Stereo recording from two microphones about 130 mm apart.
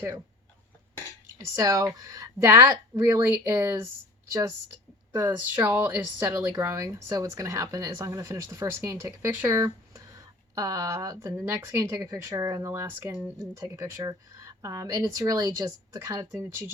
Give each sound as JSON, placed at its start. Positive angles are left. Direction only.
{"t": 1.5, "sound": "speech", "side_deg": -25}